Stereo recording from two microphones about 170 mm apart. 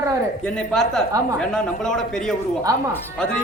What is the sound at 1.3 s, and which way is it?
Speech, 5° left (ahead or behind).